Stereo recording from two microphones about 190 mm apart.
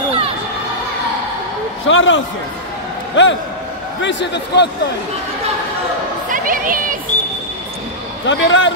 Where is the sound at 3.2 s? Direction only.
70° left (ahead or behind).